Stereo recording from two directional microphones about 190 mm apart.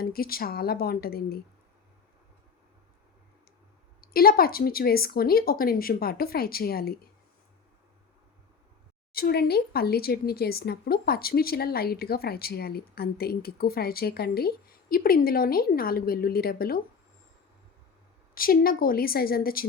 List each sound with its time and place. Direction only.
0.0 s speech: 50° left (ahead or behind)
4.0 s speech: 50° left (ahead or behind)
9.1 s speech: 55° left (ahead or behind)
18.3 s speech: 50° left (ahead or behind)